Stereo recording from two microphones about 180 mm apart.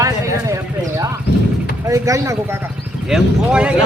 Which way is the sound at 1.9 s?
15° right (ahead or behind).